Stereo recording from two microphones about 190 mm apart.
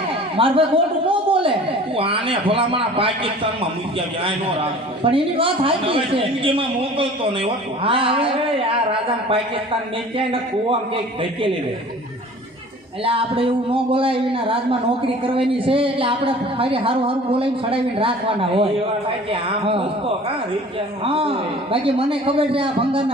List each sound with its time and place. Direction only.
0.3 s a sound: 30° right (ahead or behind)
2.0 s a man's voice: 30° right (ahead or behind)
13.1 s a man's voice: 30° right (ahead or behind)